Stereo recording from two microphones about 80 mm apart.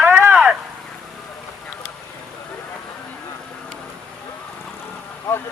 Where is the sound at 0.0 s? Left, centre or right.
Right.